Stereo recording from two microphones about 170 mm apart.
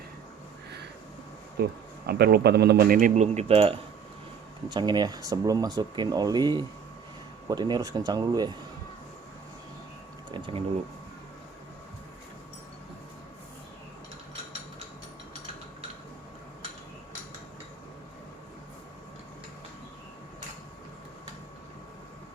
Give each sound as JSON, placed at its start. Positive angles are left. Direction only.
{"t": 1.6, "sound": "speech", "side_deg": -65}
{"t": 3.3, "sound": "speech", "side_deg": -35}
{"t": 4.7, "sound": "speech", "side_deg": -25}
{"t": 10.3, "sound": "speech", "side_deg": -30}